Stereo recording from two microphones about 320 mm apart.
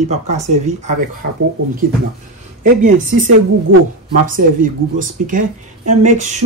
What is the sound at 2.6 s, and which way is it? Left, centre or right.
Speech, right.